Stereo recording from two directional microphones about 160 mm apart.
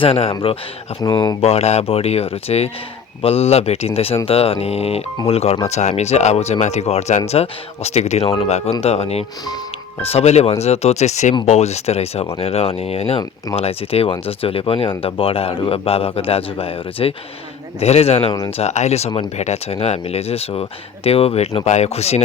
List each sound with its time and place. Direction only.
0.0 s speech: 35° left (ahead or behind)
1.5 s speech: 40° left (ahead or behind)